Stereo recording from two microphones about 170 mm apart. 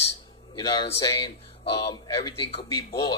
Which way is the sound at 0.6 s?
30° left (ahead or behind).